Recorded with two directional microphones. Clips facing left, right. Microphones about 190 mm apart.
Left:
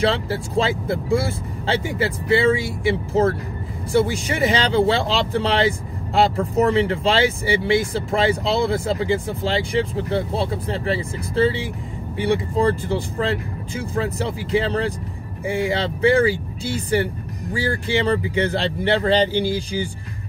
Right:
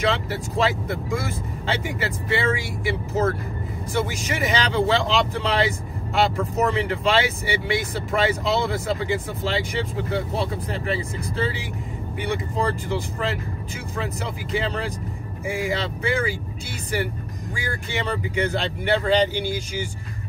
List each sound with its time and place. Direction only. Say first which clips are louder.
0.0 s speech: left 3 dB; 30° left (ahead or behind)